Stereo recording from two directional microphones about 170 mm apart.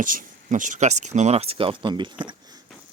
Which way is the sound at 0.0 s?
55° right (ahead or behind).